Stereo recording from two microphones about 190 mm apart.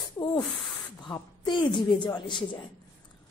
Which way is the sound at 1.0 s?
25° left (ahead or behind).